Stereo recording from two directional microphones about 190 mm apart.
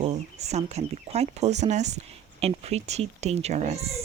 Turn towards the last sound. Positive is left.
turn(degrees=-35)  # may be behind; listen again after turning